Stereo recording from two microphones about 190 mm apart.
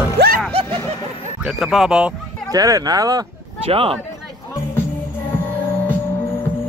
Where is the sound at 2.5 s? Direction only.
20° right (ahead or behind).